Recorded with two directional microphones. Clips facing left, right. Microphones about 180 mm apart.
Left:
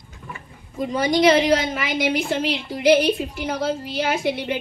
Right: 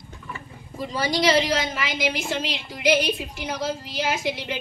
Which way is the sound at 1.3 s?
55° left (ahead or behind).